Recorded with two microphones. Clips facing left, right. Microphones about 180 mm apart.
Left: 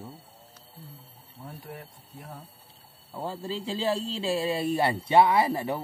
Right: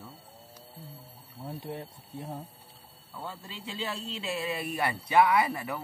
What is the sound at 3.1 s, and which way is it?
A man's voice, 35° left (ahead or behind).